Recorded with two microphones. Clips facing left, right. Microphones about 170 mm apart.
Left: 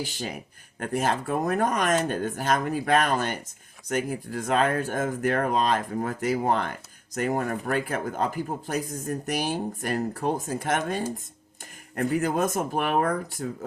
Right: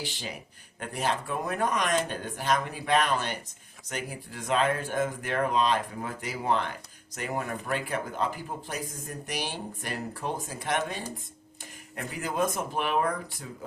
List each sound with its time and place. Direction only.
0.0 s speech: 45° left (ahead or behind)